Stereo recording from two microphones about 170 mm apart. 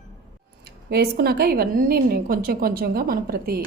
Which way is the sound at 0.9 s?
70° right (ahead or behind).